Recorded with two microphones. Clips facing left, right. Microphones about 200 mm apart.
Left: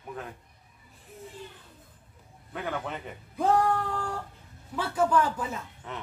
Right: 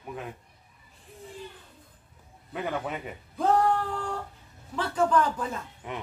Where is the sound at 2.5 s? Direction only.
5° right (ahead or behind).